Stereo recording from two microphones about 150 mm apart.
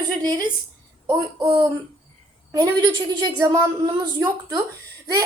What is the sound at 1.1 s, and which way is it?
A woman's voice, 30° right (ahead or behind).